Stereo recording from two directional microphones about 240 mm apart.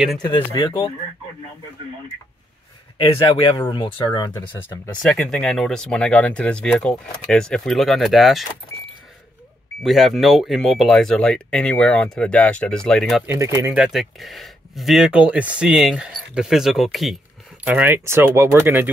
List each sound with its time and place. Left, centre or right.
0.2 s speech: centre
3.3 s speech: centre
4.4 s speech: centre
9.8 s speech: centre
13.3 s speech: centre
13.8 s speech: centre